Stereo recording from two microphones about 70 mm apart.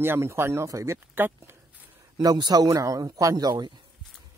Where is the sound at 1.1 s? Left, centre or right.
Right.